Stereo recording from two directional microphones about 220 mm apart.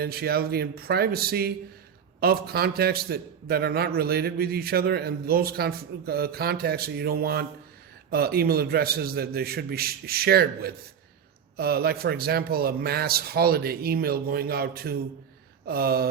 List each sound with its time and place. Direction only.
0.0 s a man's voice: 45° right (ahead or behind)